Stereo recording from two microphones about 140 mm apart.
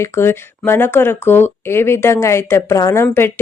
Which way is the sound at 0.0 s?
15° left (ahead or behind).